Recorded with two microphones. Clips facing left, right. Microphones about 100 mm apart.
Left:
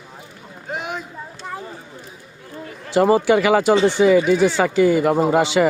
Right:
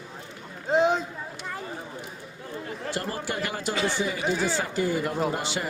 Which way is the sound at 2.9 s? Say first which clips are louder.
Left 18 dB; 90° left.